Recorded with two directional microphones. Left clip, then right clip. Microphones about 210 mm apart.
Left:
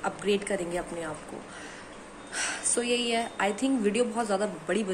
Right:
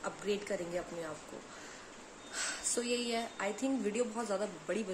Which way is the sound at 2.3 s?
20° right (ahead or behind).